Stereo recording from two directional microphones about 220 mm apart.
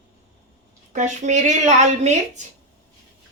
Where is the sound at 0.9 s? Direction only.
35° right (ahead or behind).